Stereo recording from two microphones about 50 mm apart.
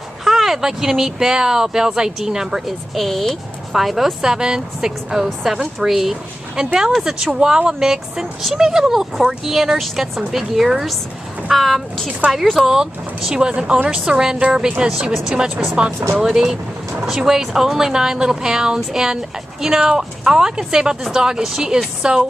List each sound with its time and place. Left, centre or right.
0.2 s speech: centre
7.2 s speech: centre
12.2 s a woman's voice: right
12.6 s speech: centre